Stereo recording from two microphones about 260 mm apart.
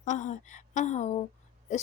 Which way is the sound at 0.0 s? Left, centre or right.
Left.